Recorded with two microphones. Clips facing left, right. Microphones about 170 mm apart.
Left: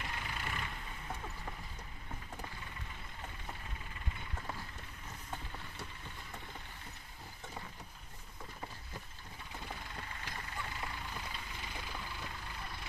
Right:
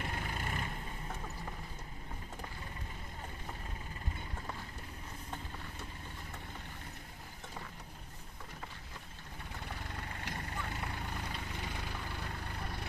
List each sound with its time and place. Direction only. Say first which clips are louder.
0.0 s vehicle: right 3 dB; 45° right (ahead or behind)
9.8 s vehicle: right 3 dB; 50° right (ahead or behind)